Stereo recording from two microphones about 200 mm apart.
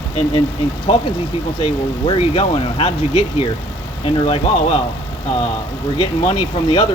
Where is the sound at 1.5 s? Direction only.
25° left (ahead or behind).